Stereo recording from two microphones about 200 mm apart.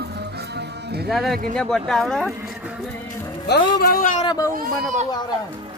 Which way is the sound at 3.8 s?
50° left (ahead or behind).